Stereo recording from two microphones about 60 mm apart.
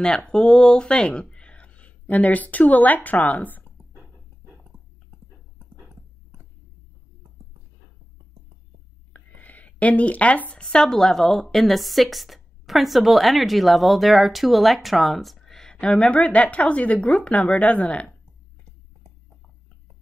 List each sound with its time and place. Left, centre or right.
0.3 s speech: centre
9.1 s a sound: left
10.6 s a woman's voice: centre